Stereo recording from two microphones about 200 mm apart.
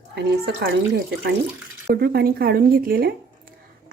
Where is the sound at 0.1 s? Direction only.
55° right (ahead or behind).